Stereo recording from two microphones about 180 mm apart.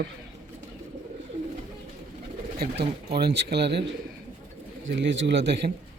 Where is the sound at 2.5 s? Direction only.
60° right (ahead or behind).